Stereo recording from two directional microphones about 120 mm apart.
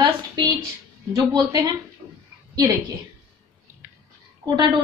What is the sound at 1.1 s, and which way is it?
Speech, 30° right (ahead or behind).